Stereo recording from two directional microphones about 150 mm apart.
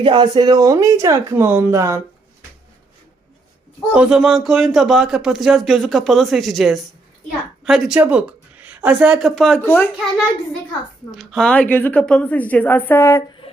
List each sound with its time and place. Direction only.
0.0 s speech: 30° right (ahead or behind)
3.9 s a woman's voice: 5° right (ahead or behind)
9.6 s a woman's voice: 15° left (ahead or behind)
11.1 s a woman's voice: centre (ahead or behind); by 13.2 s 20° left (ahead or behind)
13.4 s music: 35° left (ahead or behind)